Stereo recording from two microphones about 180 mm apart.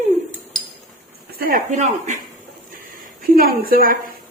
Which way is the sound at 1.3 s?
50° right (ahead or behind).